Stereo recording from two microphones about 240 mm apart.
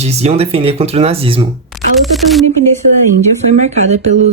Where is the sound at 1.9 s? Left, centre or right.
Centre.